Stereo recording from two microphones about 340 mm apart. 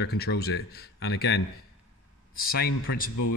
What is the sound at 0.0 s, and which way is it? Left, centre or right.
Speech, left.